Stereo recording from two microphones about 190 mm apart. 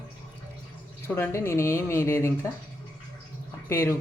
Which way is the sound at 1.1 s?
15° left (ahead or behind).